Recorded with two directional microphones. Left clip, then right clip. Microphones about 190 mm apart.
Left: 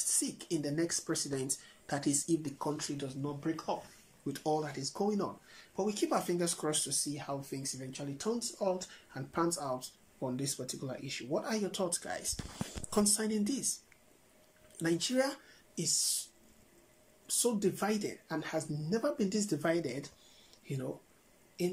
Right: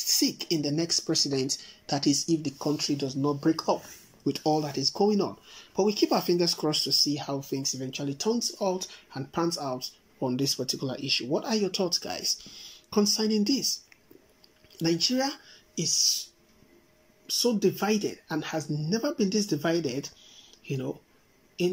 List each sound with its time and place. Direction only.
0.2 s speech: 5° right (ahead or behind)
14.8 s speech: centre (ahead or behind)
17.3 s speech: centre (ahead or behind)